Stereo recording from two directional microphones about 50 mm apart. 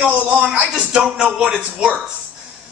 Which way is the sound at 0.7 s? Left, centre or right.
Centre.